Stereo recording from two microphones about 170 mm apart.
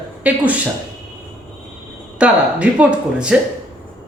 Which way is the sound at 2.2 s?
10° right (ahead or behind).